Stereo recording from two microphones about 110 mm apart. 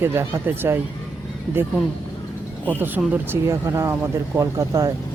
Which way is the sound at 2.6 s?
15° right (ahead or behind).